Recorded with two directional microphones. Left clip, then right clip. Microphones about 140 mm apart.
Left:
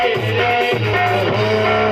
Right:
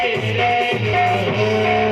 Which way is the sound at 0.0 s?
40° left (ahead or behind).